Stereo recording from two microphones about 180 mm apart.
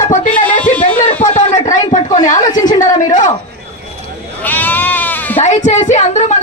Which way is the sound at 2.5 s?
20° left (ahead or behind).